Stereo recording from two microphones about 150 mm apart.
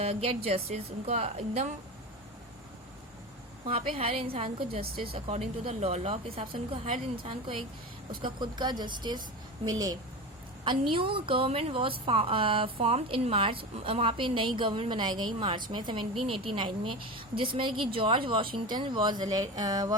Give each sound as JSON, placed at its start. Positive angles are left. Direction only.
{"t": 0.0, "sound": "a woman's voice", "side_deg": -40}
{"t": 3.7, "sound": "a woman's voice", "side_deg": -40}
{"t": 10.6, "sound": "a woman's voice", "side_deg": -35}